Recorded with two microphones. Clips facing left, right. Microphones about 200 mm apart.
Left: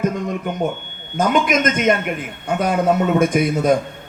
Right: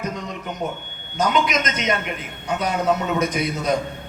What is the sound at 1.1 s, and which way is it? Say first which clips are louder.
A man's voice: left 4 dB; 50° left (ahead or behind).